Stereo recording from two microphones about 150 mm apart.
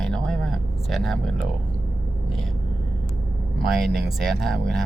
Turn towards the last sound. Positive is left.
turn(degrees=0)  # may be behind; listen again after turning